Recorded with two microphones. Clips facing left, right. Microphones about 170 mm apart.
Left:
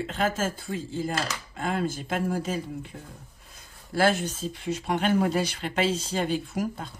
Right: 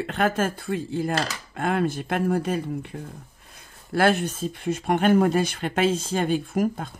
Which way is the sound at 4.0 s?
55° right (ahead or behind).